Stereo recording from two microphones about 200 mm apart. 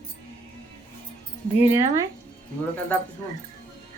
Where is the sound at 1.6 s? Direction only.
15° right (ahead or behind).